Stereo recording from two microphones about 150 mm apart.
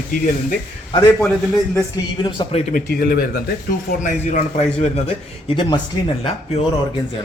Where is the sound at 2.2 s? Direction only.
30° left (ahead or behind).